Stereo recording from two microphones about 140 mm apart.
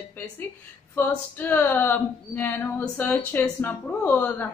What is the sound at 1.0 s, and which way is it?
Speech, 15° left (ahead or behind).